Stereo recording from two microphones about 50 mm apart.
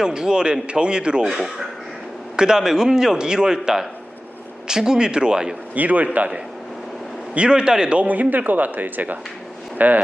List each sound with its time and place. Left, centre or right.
0.0 s a man's voice: centre
1.3 s a man's voice: centre
5.7 s speech: right
7.3 s a man's voice: centre
8.0 s speech: right